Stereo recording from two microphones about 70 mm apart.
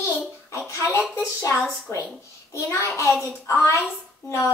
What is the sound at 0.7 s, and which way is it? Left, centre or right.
A child's voice, left.